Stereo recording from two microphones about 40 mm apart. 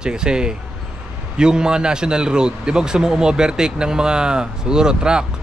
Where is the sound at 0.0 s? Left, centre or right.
Centre.